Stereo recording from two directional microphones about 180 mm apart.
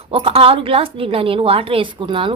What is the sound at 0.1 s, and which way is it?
A woman's voice, 30° right (ahead or behind).